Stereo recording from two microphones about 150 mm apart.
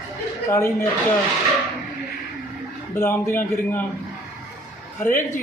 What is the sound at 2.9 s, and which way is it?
Speech, 15° left (ahead or behind).